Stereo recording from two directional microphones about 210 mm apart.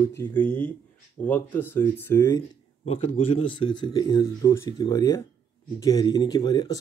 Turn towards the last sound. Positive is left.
turn(degrees=20)  # may be behind; listen again after turning